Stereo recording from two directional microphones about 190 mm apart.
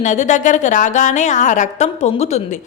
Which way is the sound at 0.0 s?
40° left (ahead or behind).